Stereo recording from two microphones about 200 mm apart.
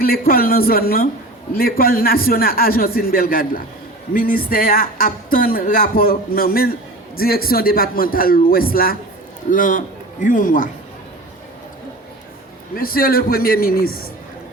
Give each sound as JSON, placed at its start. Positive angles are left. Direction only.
{"t": 0.0, "sound": "speech", "side_deg": 45}
{"t": 12.7, "sound": "speech", "side_deg": 45}